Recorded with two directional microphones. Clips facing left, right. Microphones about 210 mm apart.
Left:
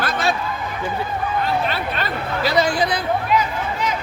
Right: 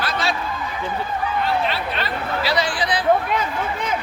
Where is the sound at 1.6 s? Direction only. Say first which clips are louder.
Left 1 dB; 45° left (ahead or behind).